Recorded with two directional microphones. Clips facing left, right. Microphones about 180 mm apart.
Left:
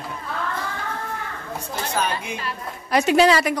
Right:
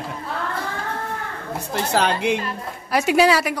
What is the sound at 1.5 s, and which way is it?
Speech, 70° right (ahead or behind).